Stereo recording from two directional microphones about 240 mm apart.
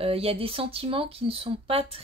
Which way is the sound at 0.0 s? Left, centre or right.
Right.